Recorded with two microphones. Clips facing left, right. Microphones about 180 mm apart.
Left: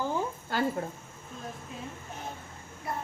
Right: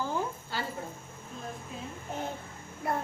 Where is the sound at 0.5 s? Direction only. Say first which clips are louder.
Left 10 dB; 50° left (ahead or behind).